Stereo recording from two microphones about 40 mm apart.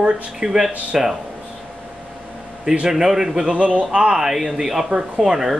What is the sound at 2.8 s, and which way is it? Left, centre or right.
Speech, centre.